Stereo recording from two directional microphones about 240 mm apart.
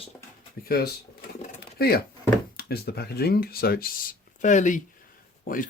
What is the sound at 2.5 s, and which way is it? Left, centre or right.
Speech, left.